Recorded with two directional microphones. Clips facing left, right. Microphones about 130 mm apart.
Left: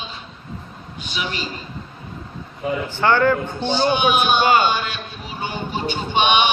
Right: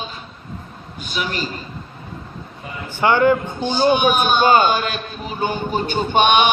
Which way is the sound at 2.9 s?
15° right (ahead or behind).